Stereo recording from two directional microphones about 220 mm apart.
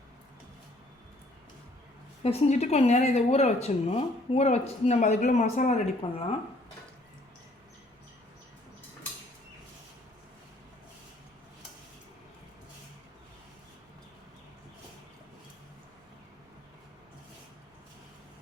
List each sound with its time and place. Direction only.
2.2 s speech: 30° left (ahead or behind)